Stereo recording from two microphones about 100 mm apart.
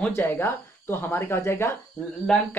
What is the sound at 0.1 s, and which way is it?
Speech, 20° left (ahead or behind).